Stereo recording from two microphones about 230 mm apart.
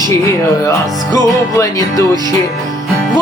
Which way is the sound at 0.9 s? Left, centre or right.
Centre.